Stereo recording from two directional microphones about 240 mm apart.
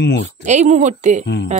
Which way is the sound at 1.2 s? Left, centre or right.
Left.